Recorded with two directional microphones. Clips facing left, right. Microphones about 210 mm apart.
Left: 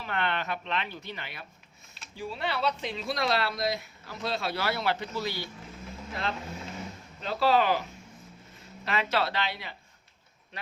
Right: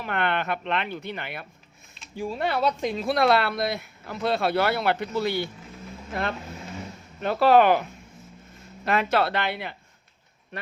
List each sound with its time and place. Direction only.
0.0 s speech: 55° right (ahead or behind)
2.1 s speech: 45° right (ahead or behind)
7.2 s speech: 60° right (ahead or behind)